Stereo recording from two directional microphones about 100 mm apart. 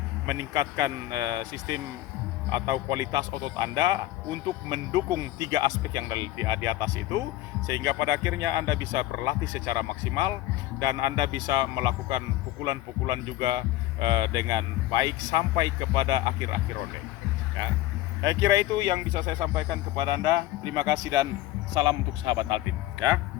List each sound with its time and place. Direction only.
0.3 s a man's voice: 35° right (ahead or behind)
18.2 s a man's voice: 40° right (ahead or behind)